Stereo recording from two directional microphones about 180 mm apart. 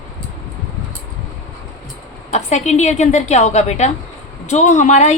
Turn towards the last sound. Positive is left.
turn(degrees=40)  # may be behind; listen again after turning